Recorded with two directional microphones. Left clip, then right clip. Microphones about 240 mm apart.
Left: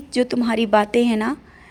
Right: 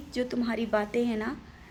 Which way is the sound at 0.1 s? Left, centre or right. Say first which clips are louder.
Left 10 dB; left.